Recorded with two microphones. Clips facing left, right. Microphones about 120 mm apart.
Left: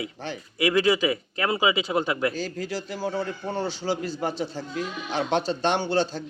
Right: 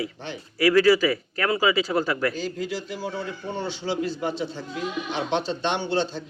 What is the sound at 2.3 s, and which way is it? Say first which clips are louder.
A man's voice: right 1 dB; 40° left (ahead or behind).